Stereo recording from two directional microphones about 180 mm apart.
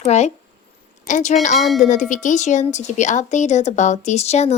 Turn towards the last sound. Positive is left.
turn(degrees=35)  # may be behind; listen again after turning